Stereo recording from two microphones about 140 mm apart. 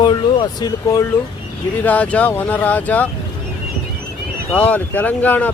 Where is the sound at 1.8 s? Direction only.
10° left (ahead or behind).